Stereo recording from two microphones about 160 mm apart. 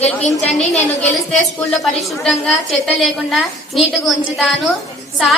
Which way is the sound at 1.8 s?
Centre (ahead or behind).